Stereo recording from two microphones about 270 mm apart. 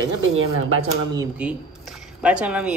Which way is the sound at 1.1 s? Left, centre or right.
Centre.